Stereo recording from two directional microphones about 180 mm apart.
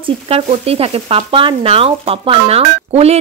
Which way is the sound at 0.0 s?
30° right (ahead or behind).